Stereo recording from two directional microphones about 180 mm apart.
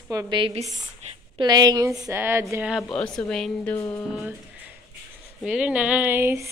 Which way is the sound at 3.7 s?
15° left (ahead or behind).